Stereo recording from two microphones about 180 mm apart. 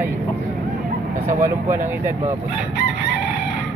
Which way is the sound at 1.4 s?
15° right (ahead or behind).